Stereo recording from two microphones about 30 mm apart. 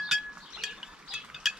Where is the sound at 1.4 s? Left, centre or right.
Centre.